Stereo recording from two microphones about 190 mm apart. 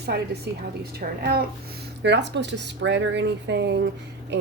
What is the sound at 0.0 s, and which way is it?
A woman's voice, 60° right (ahead or behind).